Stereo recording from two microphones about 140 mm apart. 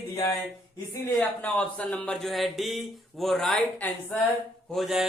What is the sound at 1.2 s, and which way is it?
Speech, 10° left (ahead or behind).